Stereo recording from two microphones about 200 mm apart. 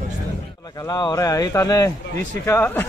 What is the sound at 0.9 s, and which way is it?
A man's voice, 20° left (ahead or behind).